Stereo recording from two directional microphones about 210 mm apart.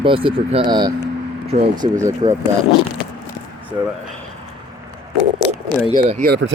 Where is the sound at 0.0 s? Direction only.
25° right (ahead or behind).